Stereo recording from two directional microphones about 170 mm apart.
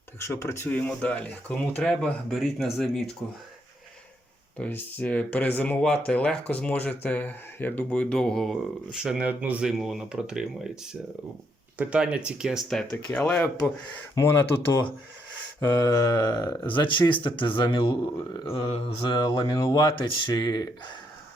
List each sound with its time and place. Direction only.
0.2 s speech: 15° left (ahead or behind)
4.5 s speech: 10° left (ahead or behind)
11.8 s speech: 5° right (ahead or behind); by 20.7 s 25° left (ahead or behind)